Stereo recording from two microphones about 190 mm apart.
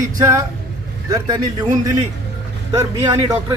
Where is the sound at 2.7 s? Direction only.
20° right (ahead or behind).